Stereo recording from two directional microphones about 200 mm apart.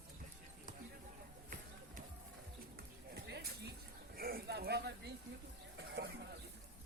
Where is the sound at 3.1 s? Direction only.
55° right (ahead or behind).